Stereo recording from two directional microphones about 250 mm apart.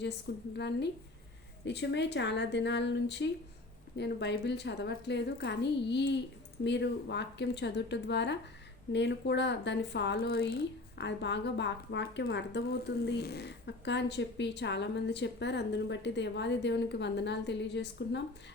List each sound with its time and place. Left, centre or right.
0.5 s a woman's voice: left